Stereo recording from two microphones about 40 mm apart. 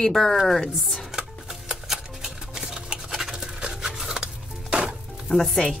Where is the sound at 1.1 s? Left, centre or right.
Centre.